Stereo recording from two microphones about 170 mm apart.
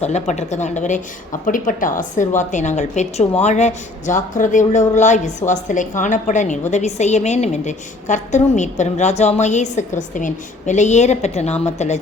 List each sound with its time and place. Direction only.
0.0 s a woman's voice: 40° left (ahead or behind)